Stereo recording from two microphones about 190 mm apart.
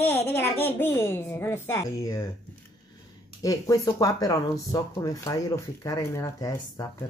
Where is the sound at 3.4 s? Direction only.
15° left (ahead or behind).